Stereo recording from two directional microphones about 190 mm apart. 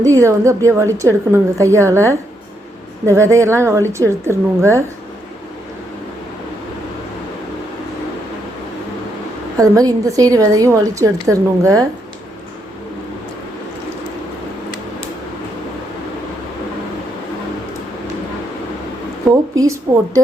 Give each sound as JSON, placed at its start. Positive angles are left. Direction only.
{"t": 0.0, "sound": "a woman's voice", "side_deg": -15}
{"t": 9.6, "sound": "a woman's voice", "side_deg": -20}
{"t": 19.5, "sound": "a woman's voice", "side_deg": -15}